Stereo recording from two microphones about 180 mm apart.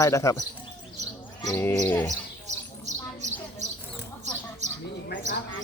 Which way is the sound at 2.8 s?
40° right (ahead or behind).